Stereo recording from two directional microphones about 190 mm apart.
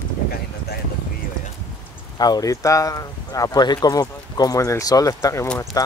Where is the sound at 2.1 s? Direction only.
20° left (ahead or behind).